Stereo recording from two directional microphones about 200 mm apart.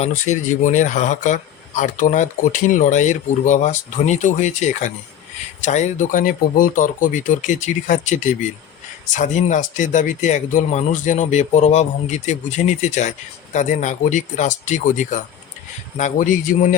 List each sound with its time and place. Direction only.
0.0 s speech: 35° left (ahead or behind)